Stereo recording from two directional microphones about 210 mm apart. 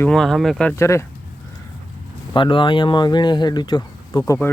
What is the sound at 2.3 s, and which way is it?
Speech, 25° left (ahead or behind).